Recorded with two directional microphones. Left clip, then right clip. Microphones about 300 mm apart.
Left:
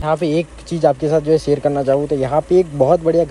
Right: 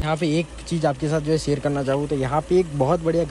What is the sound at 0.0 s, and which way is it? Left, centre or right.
Speech, centre.